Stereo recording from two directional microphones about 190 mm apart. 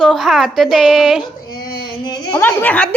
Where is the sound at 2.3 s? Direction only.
10° left (ahead or behind).